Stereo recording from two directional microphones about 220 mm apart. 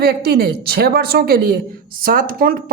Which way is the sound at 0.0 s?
45° right (ahead or behind).